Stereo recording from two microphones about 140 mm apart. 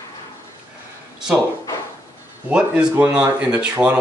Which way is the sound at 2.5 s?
5° right (ahead or behind).